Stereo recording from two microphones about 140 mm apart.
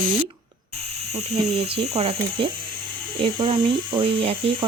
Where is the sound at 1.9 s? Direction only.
45° right (ahead or behind).